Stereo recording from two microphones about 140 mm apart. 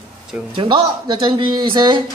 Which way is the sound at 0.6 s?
35° right (ahead or behind).